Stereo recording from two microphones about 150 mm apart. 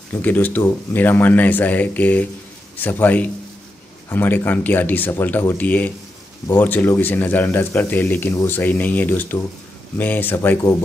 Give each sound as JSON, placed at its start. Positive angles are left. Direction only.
{"t": 0.1, "sound": "speech", "side_deg": 10}